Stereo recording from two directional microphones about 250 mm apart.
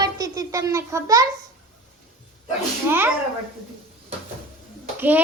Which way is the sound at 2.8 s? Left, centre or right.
Centre.